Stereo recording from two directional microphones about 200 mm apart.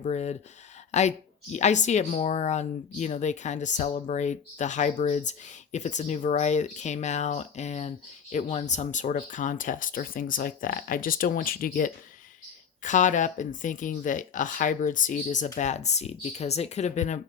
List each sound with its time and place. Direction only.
0.0 s speech: 35° left (ahead or behind)